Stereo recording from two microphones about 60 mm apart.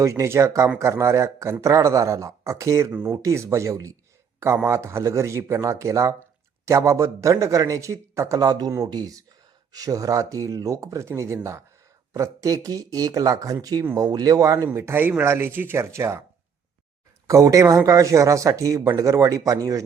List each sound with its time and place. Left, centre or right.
0.0 s a man's voice: right
2.9 s speech: right
3.2 s speech: right
4.6 s a man's voice: right
8.4 s speech: right
11.0 s a man's voice: right
12.1 s speech: right
14.9 s speech: right
15.8 s a man's voice: right
17.2 s speech: right